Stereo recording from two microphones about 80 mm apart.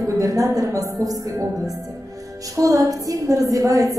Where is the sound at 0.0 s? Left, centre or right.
Right.